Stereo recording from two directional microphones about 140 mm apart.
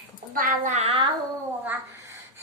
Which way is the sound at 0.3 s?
75° right (ahead or behind).